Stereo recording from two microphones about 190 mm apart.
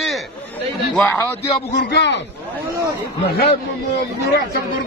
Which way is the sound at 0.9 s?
10° left (ahead or behind).